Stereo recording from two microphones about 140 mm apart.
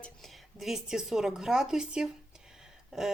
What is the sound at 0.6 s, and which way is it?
Speech, 5° right (ahead or behind).